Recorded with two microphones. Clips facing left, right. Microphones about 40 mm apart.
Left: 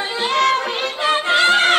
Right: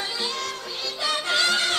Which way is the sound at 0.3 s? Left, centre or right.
Left.